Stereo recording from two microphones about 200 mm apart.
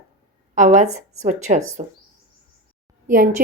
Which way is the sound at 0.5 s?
40° right (ahead or behind).